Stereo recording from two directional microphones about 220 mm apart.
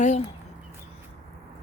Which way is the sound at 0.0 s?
30° left (ahead or behind).